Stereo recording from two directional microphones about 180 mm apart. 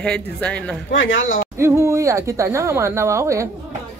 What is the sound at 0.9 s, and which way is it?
Speech, 90° left.